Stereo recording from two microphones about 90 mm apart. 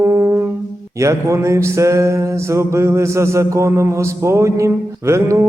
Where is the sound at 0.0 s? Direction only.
30° right (ahead or behind).